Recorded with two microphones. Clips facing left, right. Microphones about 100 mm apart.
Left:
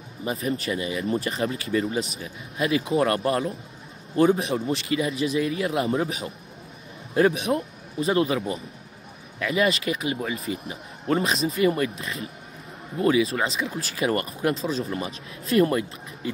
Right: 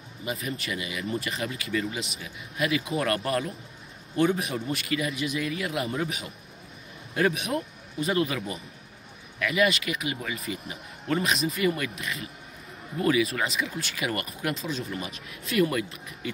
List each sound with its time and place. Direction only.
0.2 s a man's voice: 35° left (ahead or behind)